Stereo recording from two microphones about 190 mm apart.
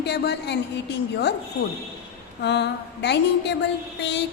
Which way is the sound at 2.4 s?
65° left (ahead or behind).